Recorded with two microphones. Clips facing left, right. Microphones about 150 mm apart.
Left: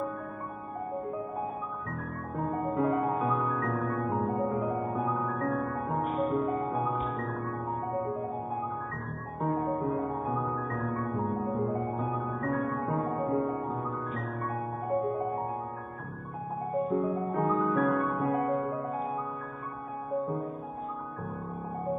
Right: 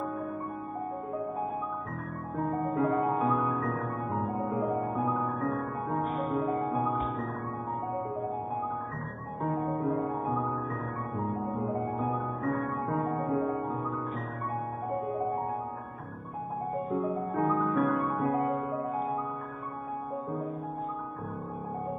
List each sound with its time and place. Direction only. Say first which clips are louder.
2.6 s music: even; centre (ahead or behind)
9.9 s music: right 1 dB; centre (ahead or behind)
16.7 s music: left 3 dB; centre (ahead or behind)